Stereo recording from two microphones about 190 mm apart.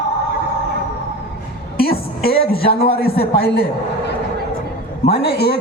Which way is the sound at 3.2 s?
30° left (ahead or behind).